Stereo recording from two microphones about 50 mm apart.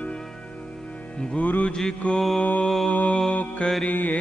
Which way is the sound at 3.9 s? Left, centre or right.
Left.